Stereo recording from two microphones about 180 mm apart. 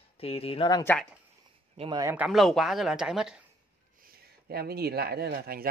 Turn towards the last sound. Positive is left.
turn(degrees=-55)  # may be behind; listen again after turning